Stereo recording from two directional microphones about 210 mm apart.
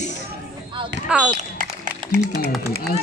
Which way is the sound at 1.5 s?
40° right (ahead or behind).